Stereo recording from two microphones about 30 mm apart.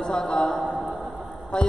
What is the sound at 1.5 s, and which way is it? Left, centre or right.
Speech, left.